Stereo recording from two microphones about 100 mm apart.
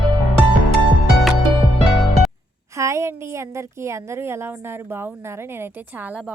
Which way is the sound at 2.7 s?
30° right (ahead or behind).